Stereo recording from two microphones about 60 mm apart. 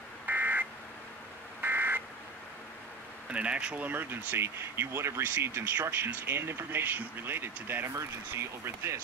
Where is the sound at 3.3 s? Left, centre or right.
Centre.